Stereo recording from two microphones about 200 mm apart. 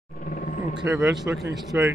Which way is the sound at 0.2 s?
45° left (ahead or behind).